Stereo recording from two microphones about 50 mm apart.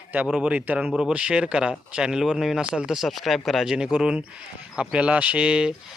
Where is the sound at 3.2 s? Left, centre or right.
Centre.